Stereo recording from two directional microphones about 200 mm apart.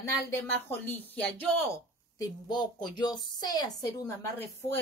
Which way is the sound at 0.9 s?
10° left (ahead or behind).